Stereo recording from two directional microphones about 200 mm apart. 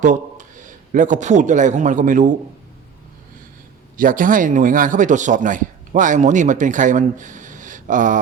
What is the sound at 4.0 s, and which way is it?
A man's voice, 45° right (ahead or behind).